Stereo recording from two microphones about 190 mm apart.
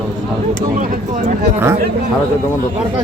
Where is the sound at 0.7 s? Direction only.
40° right (ahead or behind).